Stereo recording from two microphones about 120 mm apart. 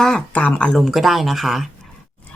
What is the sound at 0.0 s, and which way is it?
Speech, 5° left (ahead or behind).